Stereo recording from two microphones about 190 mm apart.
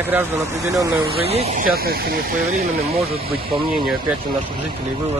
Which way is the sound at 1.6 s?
50° right (ahead or behind).